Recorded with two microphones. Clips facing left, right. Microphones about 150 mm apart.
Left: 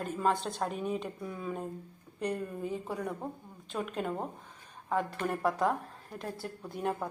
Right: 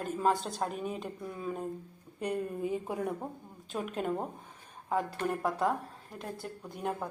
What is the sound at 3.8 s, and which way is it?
Speech, 5° right (ahead or behind).